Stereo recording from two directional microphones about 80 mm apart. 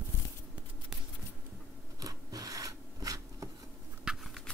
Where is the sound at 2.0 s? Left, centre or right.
Right.